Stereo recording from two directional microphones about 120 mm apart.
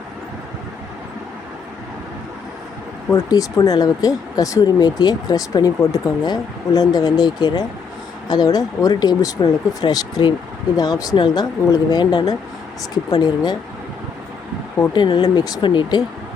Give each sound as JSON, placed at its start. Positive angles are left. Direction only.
{"t": 3.2, "sound": "speech", "side_deg": 30}
{"t": 14.9, "sound": "speech", "side_deg": 40}